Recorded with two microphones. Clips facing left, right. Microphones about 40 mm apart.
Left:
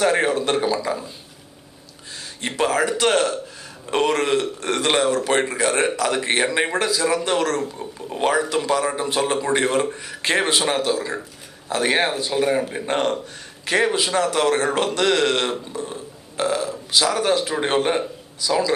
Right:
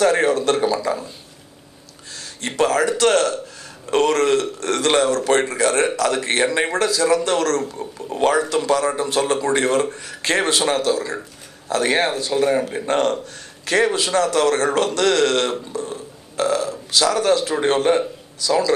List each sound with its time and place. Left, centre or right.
0.0 s a man's voice: centre
2.4 s a man's voice: centre
12.8 s a man's voice: centre
15.7 s burping: centre
16.9 s a man's voice: centre